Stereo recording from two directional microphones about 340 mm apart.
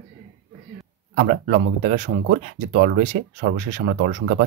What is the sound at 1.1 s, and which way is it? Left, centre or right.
Speech, right.